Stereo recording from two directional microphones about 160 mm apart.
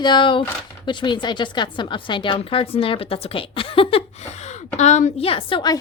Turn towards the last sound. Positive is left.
turn(degrees=30)  # may be behind; listen again after turning